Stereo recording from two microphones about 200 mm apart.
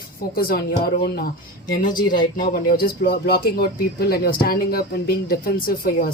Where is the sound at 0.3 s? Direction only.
45° left (ahead or behind).